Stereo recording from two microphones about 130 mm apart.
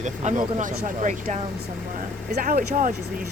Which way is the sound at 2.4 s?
75° right (ahead or behind).